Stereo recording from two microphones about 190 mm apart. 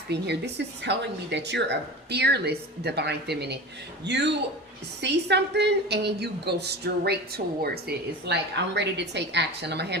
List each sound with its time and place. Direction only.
0.1 s a woman's voice: 60° right (ahead or behind)